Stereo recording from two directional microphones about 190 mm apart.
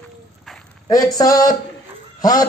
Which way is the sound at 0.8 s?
20° left (ahead or behind).